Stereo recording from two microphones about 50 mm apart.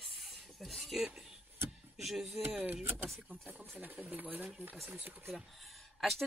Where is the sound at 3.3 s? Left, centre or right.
Right.